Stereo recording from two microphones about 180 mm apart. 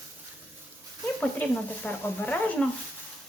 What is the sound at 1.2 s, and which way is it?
Speech, 5° left (ahead or behind).